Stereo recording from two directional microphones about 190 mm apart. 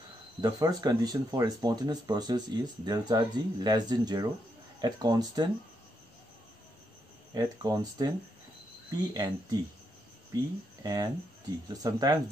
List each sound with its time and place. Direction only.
0.4 s speech: 20° right (ahead or behind)
7.3 s speech: 20° right (ahead or behind)